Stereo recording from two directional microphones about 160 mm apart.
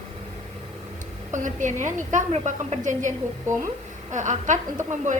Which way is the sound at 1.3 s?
50° right (ahead or behind).